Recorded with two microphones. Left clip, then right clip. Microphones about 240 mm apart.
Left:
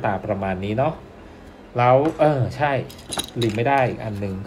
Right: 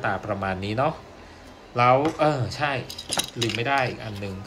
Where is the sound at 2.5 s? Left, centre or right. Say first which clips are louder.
Left 4 dB; centre.